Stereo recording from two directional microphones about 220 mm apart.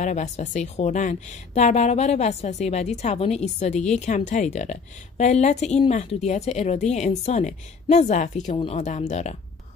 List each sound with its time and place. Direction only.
0.0 s speech: 35° left (ahead or behind)